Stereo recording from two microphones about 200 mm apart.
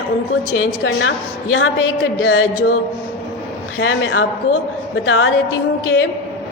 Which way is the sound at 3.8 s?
85° left.